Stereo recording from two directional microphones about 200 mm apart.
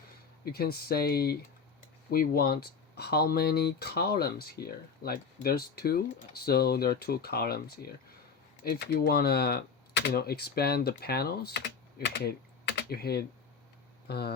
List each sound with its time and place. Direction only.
0.4 s speech: 50° left (ahead or behind)